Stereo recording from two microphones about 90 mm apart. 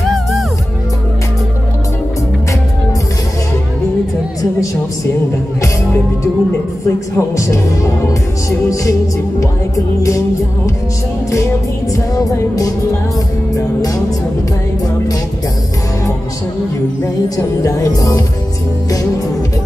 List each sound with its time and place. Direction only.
0.0 s music: centre (ahead or behind)
7.2 s music: 35° left (ahead or behind)
11.9 s music: 40° left (ahead or behind)
17.6 s music: 40° left (ahead or behind)